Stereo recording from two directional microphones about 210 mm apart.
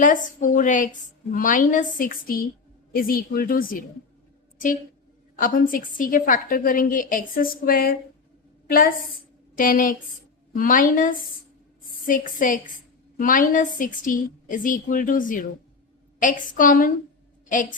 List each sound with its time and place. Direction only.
0.0 s a woman's voice: 40° left (ahead or behind)
5.4 s a woman's voice: 40° left (ahead or behind)
9.6 s a woman's voice: 40° left (ahead or behind)